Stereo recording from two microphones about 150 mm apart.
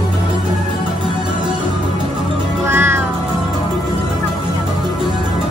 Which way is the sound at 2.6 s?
15° right (ahead or behind).